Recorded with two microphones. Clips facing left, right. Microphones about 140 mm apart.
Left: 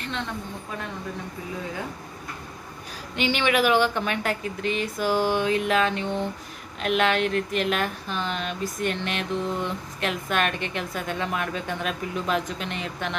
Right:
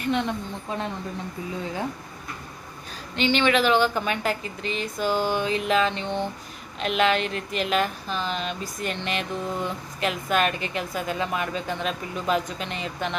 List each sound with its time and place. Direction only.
0.0 s speech: 15° right (ahead or behind)
3.2 s a woman's voice: 10° left (ahead or behind)